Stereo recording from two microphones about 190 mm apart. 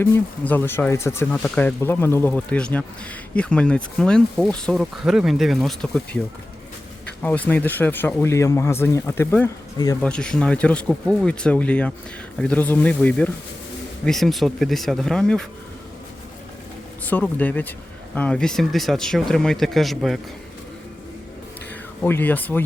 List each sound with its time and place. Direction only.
0.0 s speech: 10° left (ahead or behind)
7.2 s speech: 10° left (ahead or behind)
10.0 s speech: 5° left (ahead or behind)
17.1 s speech: 10° left (ahead or behind)
22.0 s speech: 10° left (ahead or behind)